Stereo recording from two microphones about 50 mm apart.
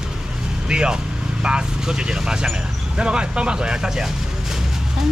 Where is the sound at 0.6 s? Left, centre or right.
Centre.